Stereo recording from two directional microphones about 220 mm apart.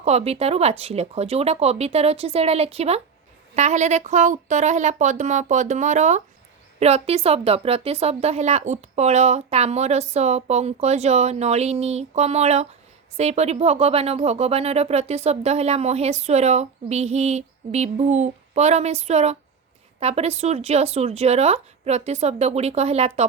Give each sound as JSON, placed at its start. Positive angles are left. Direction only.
{"t": 0.0, "sound": "speech", "side_deg": -30}